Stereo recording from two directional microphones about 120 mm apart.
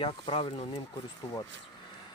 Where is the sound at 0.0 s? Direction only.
45° left (ahead or behind).